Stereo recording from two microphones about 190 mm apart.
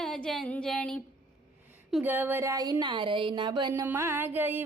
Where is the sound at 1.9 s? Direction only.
10° right (ahead or behind).